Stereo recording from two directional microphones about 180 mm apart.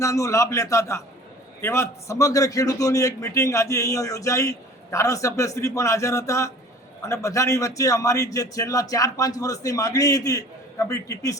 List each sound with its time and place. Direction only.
0.0 s a man's voice: 15° left (ahead or behind)